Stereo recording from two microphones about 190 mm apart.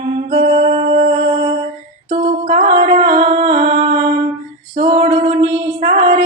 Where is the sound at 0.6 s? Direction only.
40° right (ahead or behind).